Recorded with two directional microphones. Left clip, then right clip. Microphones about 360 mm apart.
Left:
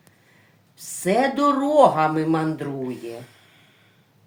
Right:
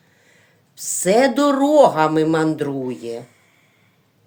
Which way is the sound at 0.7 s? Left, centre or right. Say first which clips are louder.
Right 5 dB; right.